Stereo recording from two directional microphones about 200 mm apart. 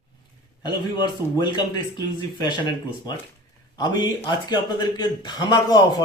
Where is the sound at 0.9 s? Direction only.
20° left (ahead or behind).